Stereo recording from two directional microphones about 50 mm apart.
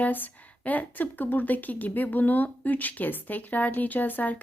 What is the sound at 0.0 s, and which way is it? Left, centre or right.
Speech, left.